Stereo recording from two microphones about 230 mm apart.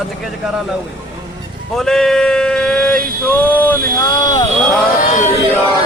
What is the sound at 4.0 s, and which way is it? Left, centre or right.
Speech, centre.